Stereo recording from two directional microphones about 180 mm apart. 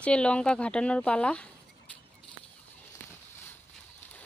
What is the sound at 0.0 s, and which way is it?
Speech, 5° left (ahead or behind).